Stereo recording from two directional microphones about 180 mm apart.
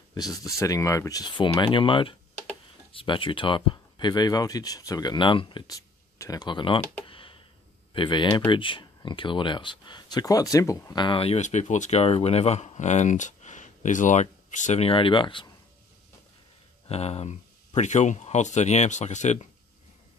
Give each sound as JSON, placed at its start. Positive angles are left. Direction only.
{"t": 0.1, "sound": "speech", "side_deg": 20}
{"t": 7.1, "sound": "a sound", "side_deg": 30}
{"t": 7.9, "sound": "speech", "side_deg": 25}
{"t": 16.8, "sound": "speech", "side_deg": 35}